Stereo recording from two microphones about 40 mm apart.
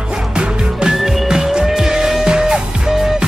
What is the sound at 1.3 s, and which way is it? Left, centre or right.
Music, centre.